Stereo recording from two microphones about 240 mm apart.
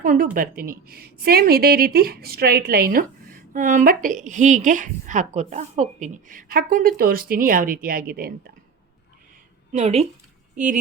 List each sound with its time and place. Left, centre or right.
0.0 s a woman's voice: right
9.7 s speech: right